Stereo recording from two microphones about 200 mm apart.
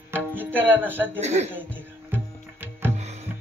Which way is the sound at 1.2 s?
35° right (ahead or behind).